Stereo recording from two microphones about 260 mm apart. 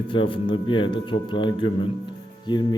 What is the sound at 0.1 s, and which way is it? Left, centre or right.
A man's voice, centre.